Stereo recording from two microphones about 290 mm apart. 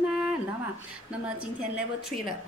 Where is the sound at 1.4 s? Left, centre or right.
Centre.